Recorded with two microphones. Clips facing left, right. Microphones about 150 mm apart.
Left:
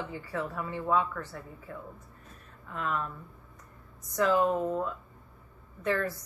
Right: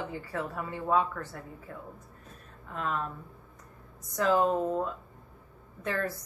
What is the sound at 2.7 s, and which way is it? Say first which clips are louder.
Speech: even; 35° right (ahead or behind).